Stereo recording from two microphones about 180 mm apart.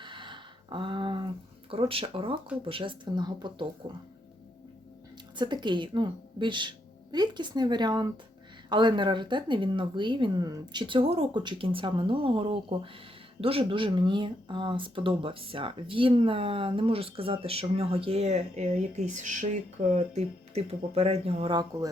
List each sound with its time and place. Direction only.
0.0 s a sound: 25° right (ahead or behind)
1.7 s speech: 30° right (ahead or behind)
5.4 s speech: 25° right (ahead or behind)